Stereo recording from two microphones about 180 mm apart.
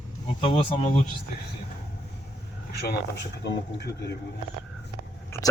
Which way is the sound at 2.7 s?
60° left (ahead or behind).